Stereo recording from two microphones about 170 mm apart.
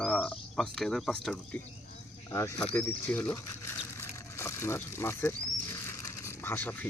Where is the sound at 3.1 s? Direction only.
15° left (ahead or behind).